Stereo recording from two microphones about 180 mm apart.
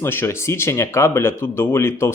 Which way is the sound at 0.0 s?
15° left (ahead or behind).